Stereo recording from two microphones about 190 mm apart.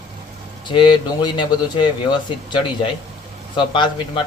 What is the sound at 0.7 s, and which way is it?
Speech, 25° left (ahead or behind).